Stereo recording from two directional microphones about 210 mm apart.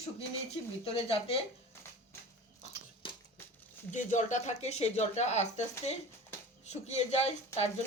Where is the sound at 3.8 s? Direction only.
35° left (ahead or behind).